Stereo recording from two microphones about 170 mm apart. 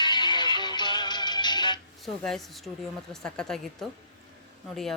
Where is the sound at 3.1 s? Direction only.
5° left (ahead or behind).